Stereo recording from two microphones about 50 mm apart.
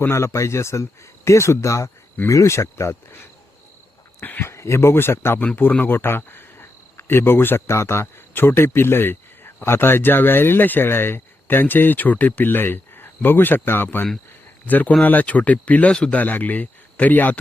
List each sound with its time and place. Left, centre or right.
0.1 s speech: left
4.2 s speech: left
4.4 s speech: left
8.3 s a man's voice: left